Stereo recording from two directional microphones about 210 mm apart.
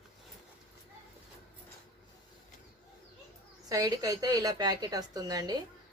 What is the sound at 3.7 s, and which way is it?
A woman's voice, 15° right (ahead or behind).